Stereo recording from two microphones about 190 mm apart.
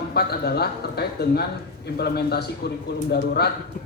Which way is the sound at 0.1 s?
55° left (ahead or behind).